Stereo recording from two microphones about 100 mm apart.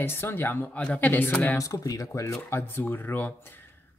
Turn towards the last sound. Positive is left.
turn(degrees=20)  # may be behind; listen again after turning